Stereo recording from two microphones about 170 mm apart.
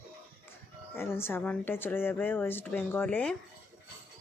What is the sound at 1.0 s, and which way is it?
Speech, 15° left (ahead or behind).